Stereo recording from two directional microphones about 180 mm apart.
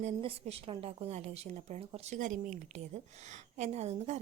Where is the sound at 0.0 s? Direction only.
35° right (ahead or behind).